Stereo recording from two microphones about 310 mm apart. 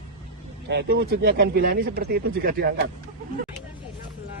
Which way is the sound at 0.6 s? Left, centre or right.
Right.